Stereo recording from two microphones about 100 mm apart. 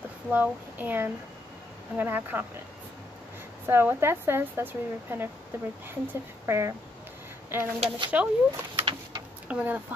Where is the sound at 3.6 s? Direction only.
20° right (ahead or behind).